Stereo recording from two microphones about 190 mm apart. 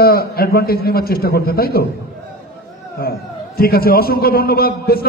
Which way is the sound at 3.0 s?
55° left (ahead or behind).